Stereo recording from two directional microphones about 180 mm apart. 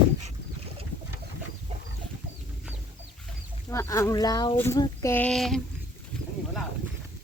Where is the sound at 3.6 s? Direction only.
15° left (ahead or behind).